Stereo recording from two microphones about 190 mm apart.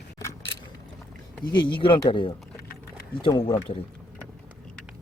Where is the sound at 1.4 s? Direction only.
25° left (ahead or behind).